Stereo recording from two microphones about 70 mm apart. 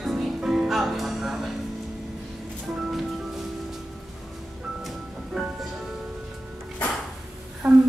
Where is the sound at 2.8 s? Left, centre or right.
Centre.